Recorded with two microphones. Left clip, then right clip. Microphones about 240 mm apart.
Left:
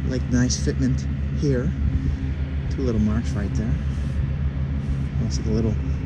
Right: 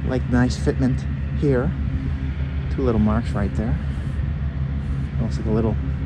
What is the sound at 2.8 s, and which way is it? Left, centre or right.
Speech, centre.